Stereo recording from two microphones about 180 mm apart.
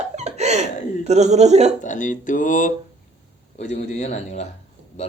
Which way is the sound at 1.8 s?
45° left (ahead or behind).